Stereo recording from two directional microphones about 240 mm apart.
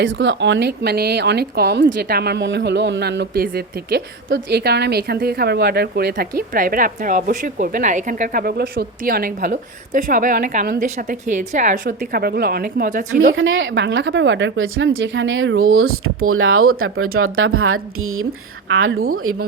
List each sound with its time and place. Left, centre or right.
0.0 s a woman's voice: right
13.3 s speech: right